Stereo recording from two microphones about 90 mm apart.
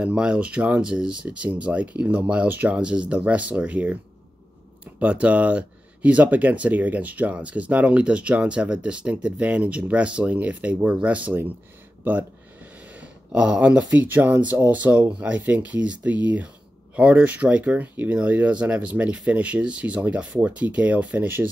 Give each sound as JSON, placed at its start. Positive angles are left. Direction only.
{"t": 0.0, "sound": "speech", "side_deg": -10}
{"t": 5.0, "sound": "speech", "side_deg": -15}